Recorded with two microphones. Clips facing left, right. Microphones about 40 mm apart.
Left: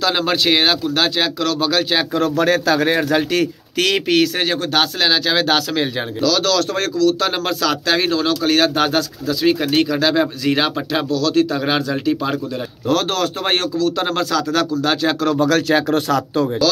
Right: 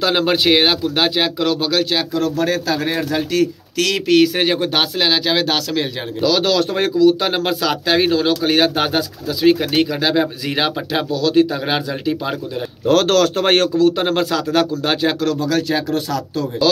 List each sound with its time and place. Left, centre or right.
0.0 s speech: centre
1.6 s a man's voice: centre
2.1 s a man's voice: left
2.4 s speech: left
3.7 s speech: left
4.4 s speech: centre
6.2 s speech: right; by 11.1 s centre
11.1 s speech: right
11.5 s speech: centre
12.8 s speech: right
13.9 s speech: right
15.3 s speech: left